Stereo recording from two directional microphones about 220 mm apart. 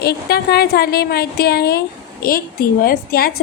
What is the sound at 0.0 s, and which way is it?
A woman's voice, 45° left (ahead or behind).